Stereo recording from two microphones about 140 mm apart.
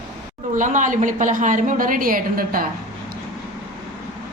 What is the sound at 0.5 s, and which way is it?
A woman's voice, 65° right (ahead or behind).